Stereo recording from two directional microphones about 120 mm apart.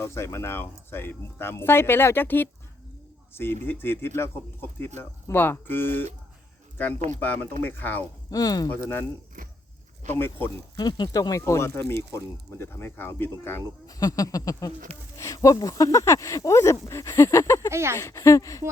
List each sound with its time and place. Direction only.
0.0 s speech: 20° left (ahead or behind)
7.2 s speech: 15° left (ahead or behind)
8.3 s speech: 30° left (ahead or behind)
8.7 s speech: 15° left (ahead or behind)
10.1 s speech: 20° left (ahead or behind)
10.8 s speech: 35° left (ahead or behind); by 13.6 s 20° left (ahead or behind)
13.8 s speech: 30° left (ahead or behind)
17.7 s speech: 25° right (ahead or behind)
17.9 s speech: 25° left (ahead or behind)